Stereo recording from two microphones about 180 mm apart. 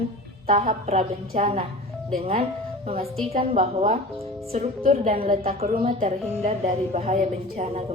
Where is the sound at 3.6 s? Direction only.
45° right (ahead or behind).